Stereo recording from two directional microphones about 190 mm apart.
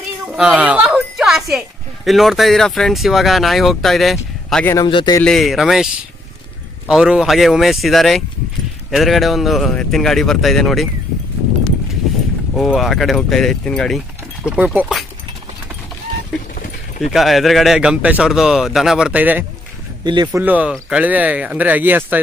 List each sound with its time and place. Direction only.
0.3 s a sound: 5° right (ahead or behind)
2.0 s speech: centre (ahead or behind)
4.8 s speech: 25° left (ahead or behind)
5.2 s speech: centre (ahead or behind)
6.9 s speech: 5° right (ahead or behind)
12.5 s speech: centre (ahead or behind)
16.5 s clip-clop: 45° left (ahead or behind)
17.1 s speech: centre (ahead or behind)
20.0 s speech: 25° right (ahead or behind)
20.2 s speech: 10° right (ahead or behind)